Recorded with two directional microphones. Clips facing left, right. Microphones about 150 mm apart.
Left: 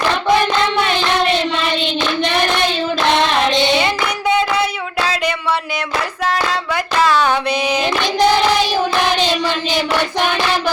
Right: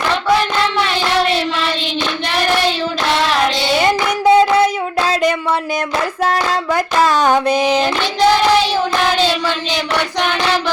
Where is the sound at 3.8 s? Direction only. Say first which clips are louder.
Right 4 dB; 40° right (ahead or behind).